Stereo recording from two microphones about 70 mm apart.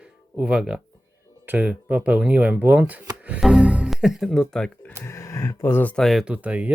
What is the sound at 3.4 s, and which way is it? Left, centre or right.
Music, centre.